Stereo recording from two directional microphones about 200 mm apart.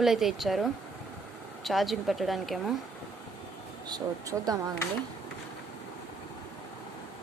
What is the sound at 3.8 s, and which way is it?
Speech, 20° right (ahead or behind).